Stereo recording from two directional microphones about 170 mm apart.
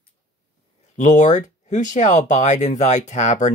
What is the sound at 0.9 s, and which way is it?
Speech, 45° left (ahead or behind).